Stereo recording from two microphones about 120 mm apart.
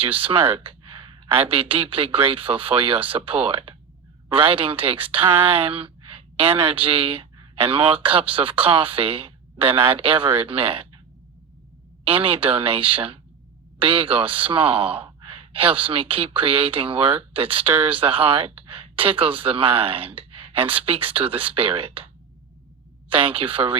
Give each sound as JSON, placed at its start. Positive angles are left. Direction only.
{"t": 0.0, "sound": "a woman's voice", "side_deg": -50}
{"t": 12.0, "sound": "speech", "side_deg": -50}